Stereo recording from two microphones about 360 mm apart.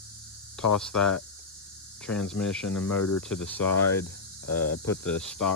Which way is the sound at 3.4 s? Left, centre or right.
Centre.